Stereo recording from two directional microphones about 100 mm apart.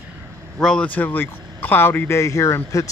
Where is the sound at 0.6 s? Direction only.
5° left (ahead or behind).